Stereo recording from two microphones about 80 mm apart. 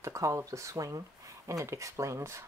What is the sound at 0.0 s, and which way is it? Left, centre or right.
Speech, right.